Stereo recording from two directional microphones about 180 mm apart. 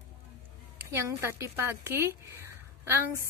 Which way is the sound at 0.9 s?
15° right (ahead or behind).